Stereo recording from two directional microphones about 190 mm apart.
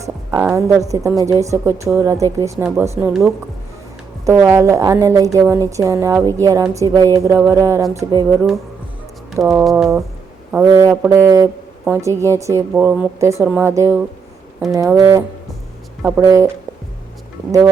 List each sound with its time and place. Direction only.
0.0 s a sound: 15° right (ahead or behind)
0.5 s a woman's voice: 15° right (ahead or behind)
9.4 s a woman's voice: 15° right (ahead or behind)
9.6 s speech: centre (ahead or behind)
10.8 s a woman's voice: 15° right (ahead or behind)